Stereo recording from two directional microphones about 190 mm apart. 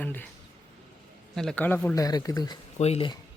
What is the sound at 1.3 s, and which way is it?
Speech, 5° left (ahead or behind).